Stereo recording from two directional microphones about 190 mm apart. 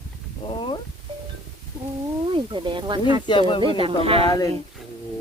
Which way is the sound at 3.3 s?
25° left (ahead or behind).